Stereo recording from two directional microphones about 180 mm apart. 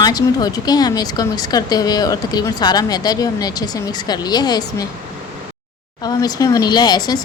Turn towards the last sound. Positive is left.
turn(degrees=20)  # may be behind; listen again after turning